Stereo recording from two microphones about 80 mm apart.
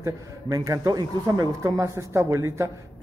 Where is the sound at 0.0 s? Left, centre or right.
Right.